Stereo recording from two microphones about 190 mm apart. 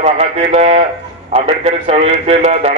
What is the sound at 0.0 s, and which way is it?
A man's voice, 35° right (ahead or behind).